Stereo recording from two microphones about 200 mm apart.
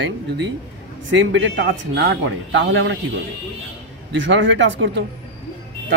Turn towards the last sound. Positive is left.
turn(degrees=-65)  # may be behind; listen again after turning